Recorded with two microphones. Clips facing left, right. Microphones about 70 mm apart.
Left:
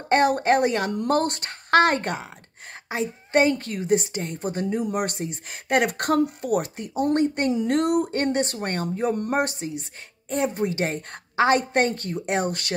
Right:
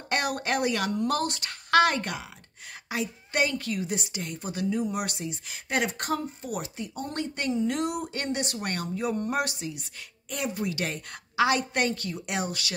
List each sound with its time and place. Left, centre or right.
0.1 s a woman's voice: left